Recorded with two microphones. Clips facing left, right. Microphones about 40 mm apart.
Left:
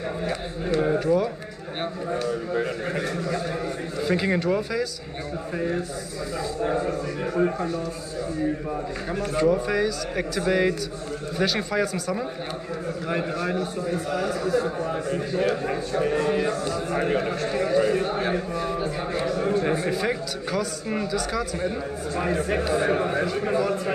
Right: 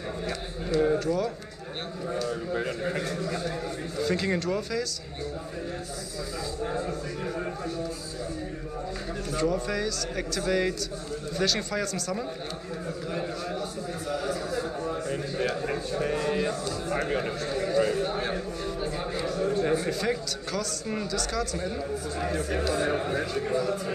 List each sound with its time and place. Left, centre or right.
0.7 s speech: centre
2.5 s speech: left
6.6 s speech: left
9.1 s speech: left
9.4 s speech: centre
13.1 s a man's voice: left
16.0 s speech: left
17.5 s a sound: left
19.5 s speech: left
22.1 s a man's voice: left